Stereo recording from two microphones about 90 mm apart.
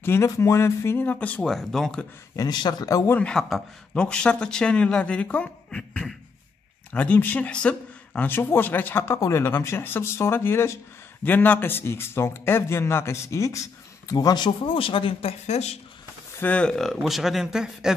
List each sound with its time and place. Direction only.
0.0 s a man's voice: 30° left (ahead or behind)
1.4 s speech: 5° left (ahead or behind)
2.3 s speech: 50° left (ahead or behind)
3.1 s a man's voice: 15° left (ahead or behind); by 14.1 s 35° left (ahead or behind)
14.1 s speech: 50° left (ahead or behind)
14.6 s a man's voice: 85° left
16.3 s speech: 15° left (ahead or behind); by 17.9 s 5° right (ahead or behind)